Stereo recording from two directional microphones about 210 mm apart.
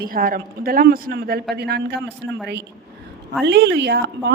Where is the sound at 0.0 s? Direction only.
40° right (ahead or behind); by 2.4 s 55° right (ahead or behind).